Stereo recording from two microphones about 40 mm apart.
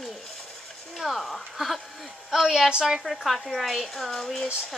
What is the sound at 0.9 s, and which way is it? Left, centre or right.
Speech, centre.